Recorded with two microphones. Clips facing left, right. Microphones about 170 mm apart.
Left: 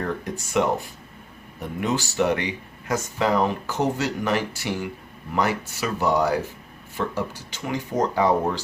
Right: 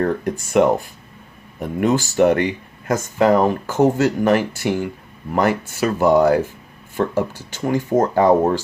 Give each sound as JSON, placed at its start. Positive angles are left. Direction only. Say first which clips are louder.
{"t": 0.0, "sound": "speech", "louder": "right 8 dB", "side_deg": -50}